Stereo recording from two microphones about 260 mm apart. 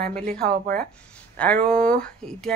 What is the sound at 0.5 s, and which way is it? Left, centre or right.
Speech, right.